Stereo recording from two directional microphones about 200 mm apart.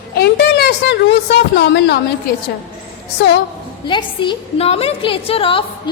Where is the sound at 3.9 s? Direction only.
25° left (ahead or behind).